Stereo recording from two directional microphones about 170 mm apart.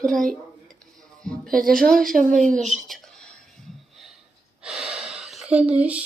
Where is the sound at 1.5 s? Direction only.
55° right (ahead or behind).